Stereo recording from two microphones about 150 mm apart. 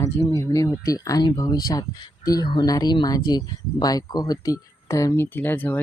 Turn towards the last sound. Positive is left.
turn(degrees=10)  # may be behind; listen again after turning